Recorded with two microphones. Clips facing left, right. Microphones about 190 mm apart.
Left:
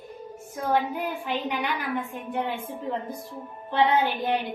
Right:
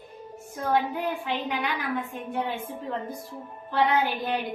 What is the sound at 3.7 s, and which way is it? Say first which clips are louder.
Music: left 1 dB; 25° left (ahead or behind).